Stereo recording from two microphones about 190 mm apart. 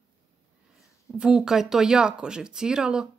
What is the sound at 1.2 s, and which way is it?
Speech, 5° right (ahead or behind).